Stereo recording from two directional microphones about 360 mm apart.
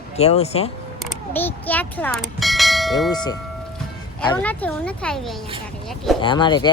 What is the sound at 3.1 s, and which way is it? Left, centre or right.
Speech, centre.